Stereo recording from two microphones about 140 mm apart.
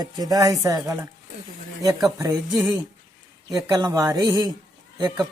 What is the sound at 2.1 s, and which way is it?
Speech, 25° right (ahead or behind).